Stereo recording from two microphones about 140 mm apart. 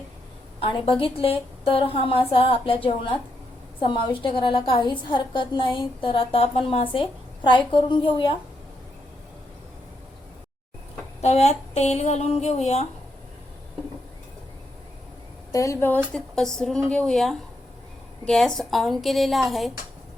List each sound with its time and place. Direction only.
0.6 s a woman's voice: 40° left (ahead or behind)
11.2 s speech: 50° left (ahead or behind)
15.5 s speech: 20° left (ahead or behind)
16.1 s a woman's voice: 5° left (ahead or behind)